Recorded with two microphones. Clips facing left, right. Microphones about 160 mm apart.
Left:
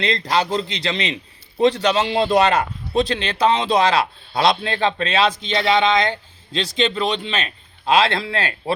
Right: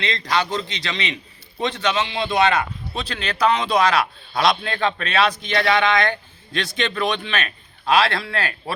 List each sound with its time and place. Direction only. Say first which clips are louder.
0.0 s a man's voice: left 3 dB; 30° left (ahead or behind)